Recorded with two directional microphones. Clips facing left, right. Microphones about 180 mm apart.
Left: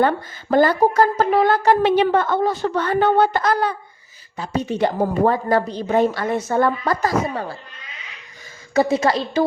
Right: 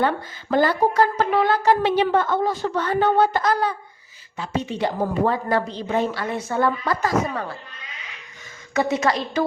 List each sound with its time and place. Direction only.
0.5 s a woman's voice: 45° left (ahead or behind)
1.6 s a woman's voice: 55° left (ahead or behind)
4.4 s a woman's voice: 40° left (ahead or behind)
7.3 s speech: 30° left (ahead or behind)
8.7 s a woman's voice: 30° left (ahead or behind)